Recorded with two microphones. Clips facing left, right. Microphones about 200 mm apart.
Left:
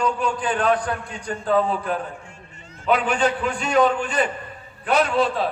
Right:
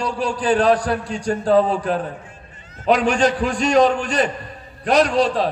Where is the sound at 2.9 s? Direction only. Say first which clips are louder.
Right 3 dB; 85° right.